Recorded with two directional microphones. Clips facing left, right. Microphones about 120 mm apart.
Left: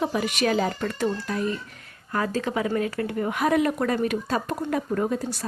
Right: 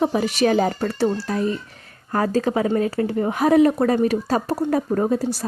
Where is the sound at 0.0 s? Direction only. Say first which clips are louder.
Right 5 dB; 35° right (ahead or behind).